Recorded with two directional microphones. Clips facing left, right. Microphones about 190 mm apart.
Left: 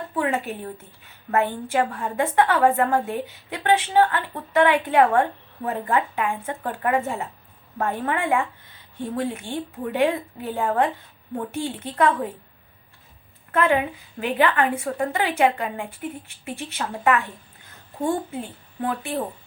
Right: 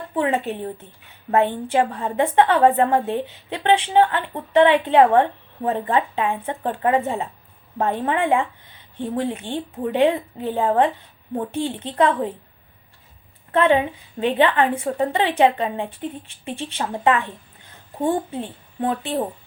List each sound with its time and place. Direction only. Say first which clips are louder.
0.1 s a woman's voice: right 4 dB; 25° right (ahead or behind)
13.5 s a woman's voice: right 3 dB; 25° right (ahead or behind)
18.3 s a woman's voice: right 3 dB; 20° right (ahead or behind)